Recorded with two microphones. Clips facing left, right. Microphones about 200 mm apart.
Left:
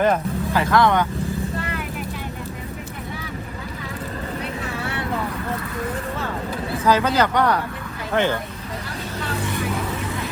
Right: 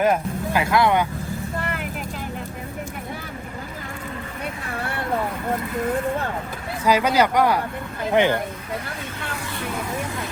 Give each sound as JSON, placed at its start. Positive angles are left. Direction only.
{"t": 0.0, "sound": "speech", "side_deg": -10}
{"t": 4.8, "sound": "vehicle", "side_deg": -50}
{"t": 6.8, "sound": "speech", "side_deg": -10}